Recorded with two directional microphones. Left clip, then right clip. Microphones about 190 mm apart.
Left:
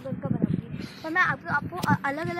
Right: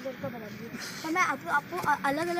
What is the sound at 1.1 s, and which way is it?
Speech, 10° right (ahead or behind).